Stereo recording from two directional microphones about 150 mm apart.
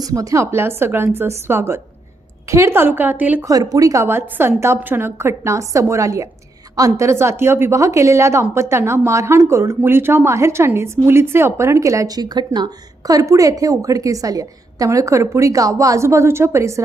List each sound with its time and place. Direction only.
0.0 s a woman's voice: 20° right (ahead or behind)
3.4 s a woman's voice: 25° right (ahead or behind)